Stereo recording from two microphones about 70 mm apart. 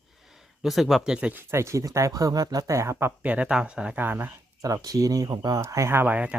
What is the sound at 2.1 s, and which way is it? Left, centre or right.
Speech, right.